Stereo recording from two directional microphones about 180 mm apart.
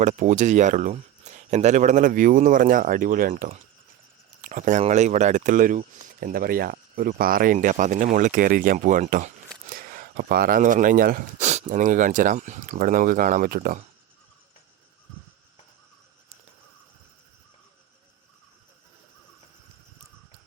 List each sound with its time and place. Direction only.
0.0 s speech: 45° right (ahead or behind)
4.4 s a sound: 45° right (ahead or behind)
4.8 s speech: 40° right (ahead or behind)